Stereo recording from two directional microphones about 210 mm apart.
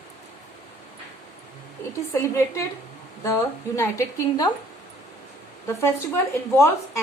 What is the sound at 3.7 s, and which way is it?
Speech, 15° left (ahead or behind).